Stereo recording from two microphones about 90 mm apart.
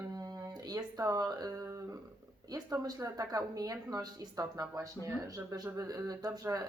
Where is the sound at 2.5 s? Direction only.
45° right (ahead or behind).